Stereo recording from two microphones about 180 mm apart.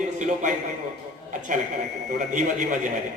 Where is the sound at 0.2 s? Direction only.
40° right (ahead or behind).